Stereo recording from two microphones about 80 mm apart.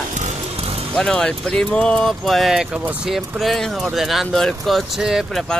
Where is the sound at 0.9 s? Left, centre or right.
Centre.